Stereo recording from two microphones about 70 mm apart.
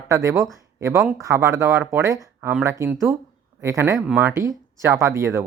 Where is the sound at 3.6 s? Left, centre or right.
Right.